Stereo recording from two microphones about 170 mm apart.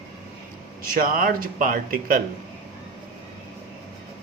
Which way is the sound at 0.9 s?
55° right (ahead or behind).